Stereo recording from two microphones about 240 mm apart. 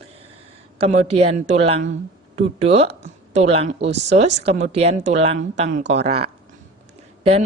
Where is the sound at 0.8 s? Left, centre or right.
Right.